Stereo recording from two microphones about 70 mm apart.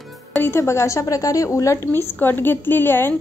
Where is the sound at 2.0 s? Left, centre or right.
Left.